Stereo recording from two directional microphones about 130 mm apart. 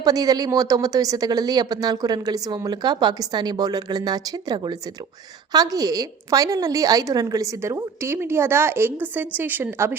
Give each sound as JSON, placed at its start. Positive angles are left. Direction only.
{"t": 0.0, "sound": "a woman's voice", "side_deg": -30}